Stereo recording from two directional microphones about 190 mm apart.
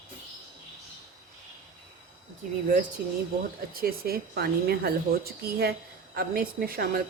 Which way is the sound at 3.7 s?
50° right (ahead or behind).